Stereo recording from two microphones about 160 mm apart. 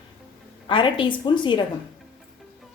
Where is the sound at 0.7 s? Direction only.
30° left (ahead or behind).